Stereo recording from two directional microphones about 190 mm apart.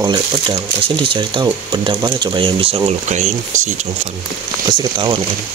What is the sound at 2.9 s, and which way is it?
Speech, 40° right (ahead or behind).